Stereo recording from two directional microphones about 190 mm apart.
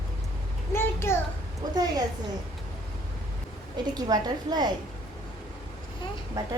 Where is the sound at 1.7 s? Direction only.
20° right (ahead or behind).